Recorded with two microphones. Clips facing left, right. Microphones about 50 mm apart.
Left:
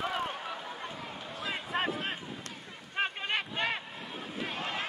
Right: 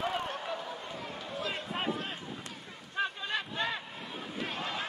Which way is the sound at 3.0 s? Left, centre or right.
Left.